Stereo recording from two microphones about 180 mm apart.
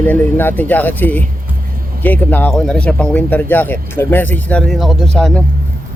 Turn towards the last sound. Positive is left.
turn(degrees=5)  # may be behind; listen again after turning